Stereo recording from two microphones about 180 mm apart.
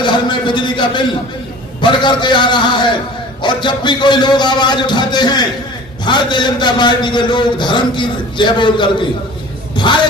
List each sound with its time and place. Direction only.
0.0 s a man's voice: 25° left (ahead or behind)